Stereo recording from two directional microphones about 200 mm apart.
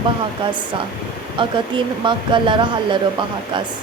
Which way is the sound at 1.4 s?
25° right (ahead or behind).